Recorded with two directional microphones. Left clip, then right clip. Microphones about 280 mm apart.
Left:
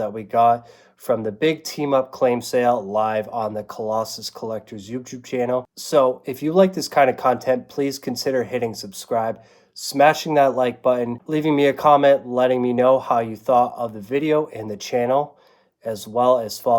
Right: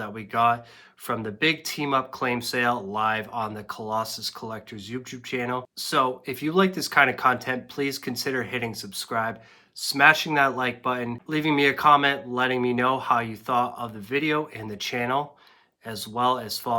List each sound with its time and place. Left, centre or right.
0.0 s speech: right